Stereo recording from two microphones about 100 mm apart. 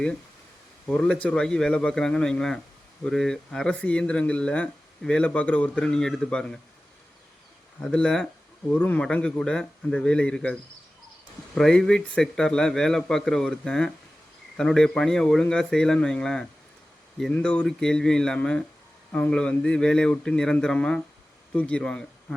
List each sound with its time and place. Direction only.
0.9 s speech: 10° left (ahead or behind)
7.8 s a man's voice: 10° left (ahead or behind)